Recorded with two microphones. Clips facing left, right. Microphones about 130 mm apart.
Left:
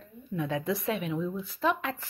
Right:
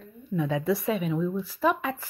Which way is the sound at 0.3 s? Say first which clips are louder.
Right 4 dB; centre (ahead or behind).